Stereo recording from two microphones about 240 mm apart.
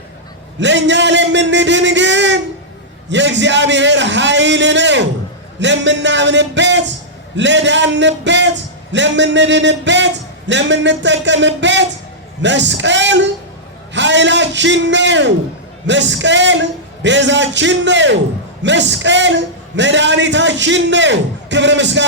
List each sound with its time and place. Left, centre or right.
0.6 s a man's voice: right